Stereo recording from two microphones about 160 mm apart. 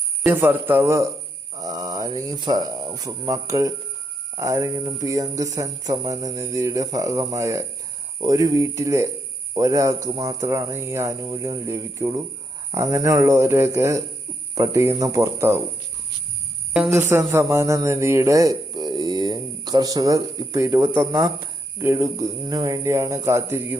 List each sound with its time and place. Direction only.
0.3 s speech: 15° right (ahead or behind)
16.9 s speech: 15° right (ahead or behind)